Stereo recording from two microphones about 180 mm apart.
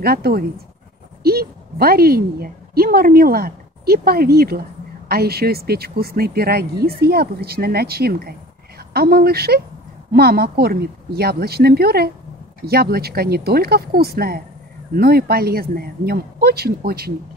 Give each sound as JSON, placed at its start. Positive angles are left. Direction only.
{"t": 0.0, "sound": "a woman's voice", "side_deg": -60}